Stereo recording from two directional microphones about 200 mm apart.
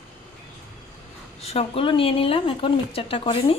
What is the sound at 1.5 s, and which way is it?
Speech, 30° left (ahead or behind).